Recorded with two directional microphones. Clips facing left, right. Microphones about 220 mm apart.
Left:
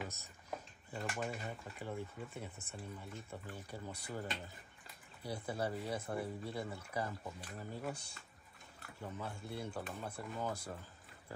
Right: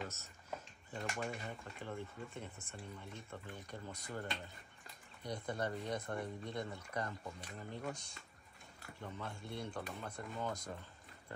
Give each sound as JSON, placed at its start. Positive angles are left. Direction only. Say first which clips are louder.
{"t": 0.0, "sound": "a sound", "louder": "even", "side_deg": 10}
{"t": 0.9, "sound": "speech", "louder": "left 1 dB", "side_deg": 0}
{"t": 9.0, "sound": "speech", "louder": "left 2 dB", "side_deg": 5}